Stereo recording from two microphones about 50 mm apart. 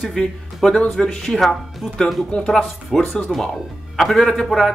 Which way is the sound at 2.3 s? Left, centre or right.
Left.